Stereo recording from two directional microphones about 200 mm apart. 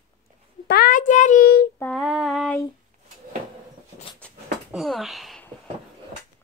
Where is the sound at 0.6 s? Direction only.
50° left (ahead or behind).